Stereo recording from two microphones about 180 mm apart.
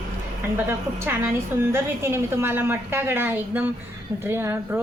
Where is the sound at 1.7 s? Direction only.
15° right (ahead or behind).